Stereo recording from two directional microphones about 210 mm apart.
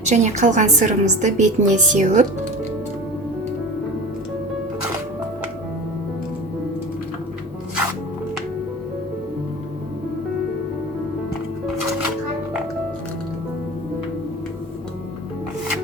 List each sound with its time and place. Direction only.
0.0 s a woman's voice: 35° right (ahead or behind)